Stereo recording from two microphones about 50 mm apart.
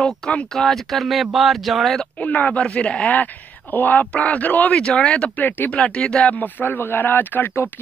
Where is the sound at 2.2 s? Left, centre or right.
Left.